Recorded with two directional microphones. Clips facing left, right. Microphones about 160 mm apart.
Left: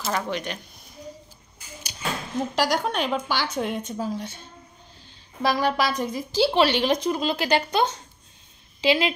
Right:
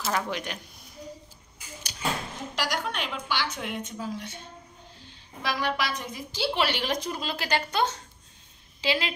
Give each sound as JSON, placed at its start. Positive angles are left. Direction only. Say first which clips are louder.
{"t": 0.0, "sound": "speech", "louder": "left 2 dB", "side_deg": -5}
{"t": 2.5, "sound": "speech", "louder": "left 6 dB", "side_deg": 35}
{"t": 5.4, "sound": "a woman's voice", "louder": "left 6 dB", "side_deg": 35}